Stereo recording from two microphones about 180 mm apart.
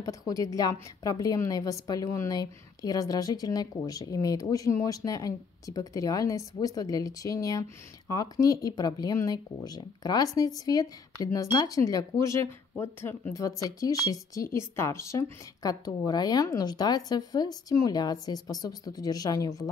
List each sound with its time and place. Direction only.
0.3 s speech: 20° left (ahead or behind)